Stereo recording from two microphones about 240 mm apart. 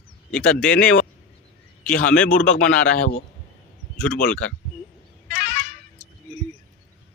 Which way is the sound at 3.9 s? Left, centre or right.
Centre.